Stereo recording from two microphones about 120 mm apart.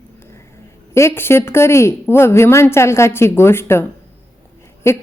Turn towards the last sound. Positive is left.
turn(degrees=20)  # may be behind; listen again after turning